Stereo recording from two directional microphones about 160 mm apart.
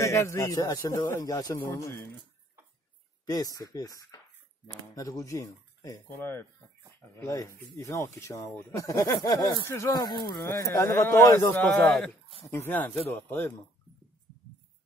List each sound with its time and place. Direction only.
0.0 s speech: 20° left (ahead or behind)
3.3 s speech: 25° left (ahead or behind)